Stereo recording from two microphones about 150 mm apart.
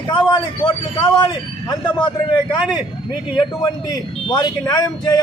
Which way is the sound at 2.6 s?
5° right (ahead or behind).